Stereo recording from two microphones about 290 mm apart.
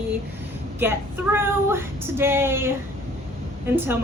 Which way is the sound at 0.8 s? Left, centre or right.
Centre.